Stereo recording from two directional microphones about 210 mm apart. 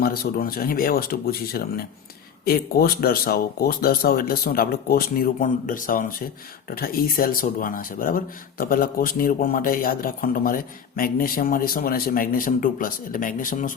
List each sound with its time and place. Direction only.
0.0 s speech: 45° left (ahead or behind)